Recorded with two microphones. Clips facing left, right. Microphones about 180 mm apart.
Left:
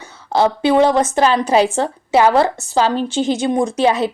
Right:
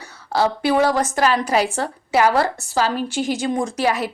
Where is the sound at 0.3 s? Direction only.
25° left (ahead or behind).